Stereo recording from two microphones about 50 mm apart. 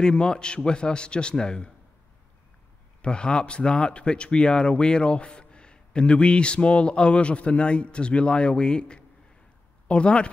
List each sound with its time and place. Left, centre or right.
0.0 s speech: centre
3.0 s speech: centre